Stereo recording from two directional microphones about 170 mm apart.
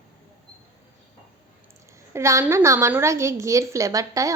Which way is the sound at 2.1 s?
15° right (ahead or behind).